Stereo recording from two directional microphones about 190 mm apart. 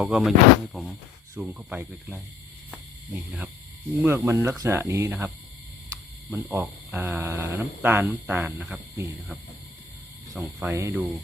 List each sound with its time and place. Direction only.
0.0 s speech: centre (ahead or behind)
4.0 s speech: 15° right (ahead or behind)
6.3 s speech: 10° right (ahead or behind)